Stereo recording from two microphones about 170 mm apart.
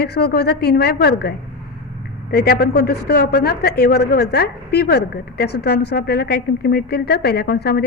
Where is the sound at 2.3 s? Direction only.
70° left (ahead or behind).